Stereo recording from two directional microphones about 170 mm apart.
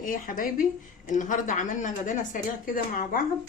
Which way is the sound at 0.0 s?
55° left (ahead or behind).